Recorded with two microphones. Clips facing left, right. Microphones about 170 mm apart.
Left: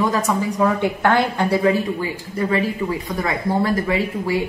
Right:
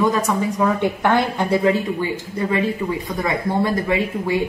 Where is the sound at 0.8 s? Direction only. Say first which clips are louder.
Even; 20° right (ahead or behind).